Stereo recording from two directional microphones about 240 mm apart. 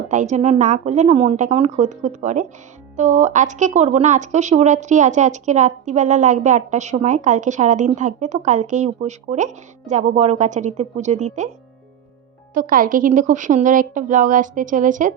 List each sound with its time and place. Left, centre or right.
0.1 s speech: right
12.5 s a woman's voice: right